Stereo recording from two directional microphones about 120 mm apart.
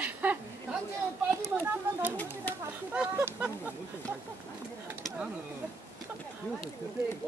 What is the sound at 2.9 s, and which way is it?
Speech, 15° right (ahead or behind).